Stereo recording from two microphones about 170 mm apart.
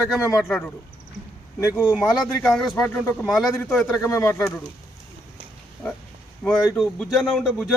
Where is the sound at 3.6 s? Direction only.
5° left (ahead or behind).